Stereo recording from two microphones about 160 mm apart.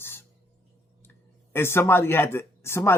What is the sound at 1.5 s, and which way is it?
Speech, 15° left (ahead or behind).